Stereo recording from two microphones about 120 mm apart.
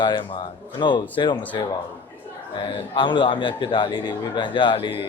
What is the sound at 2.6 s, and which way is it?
A man's voice, 45° left (ahead or behind).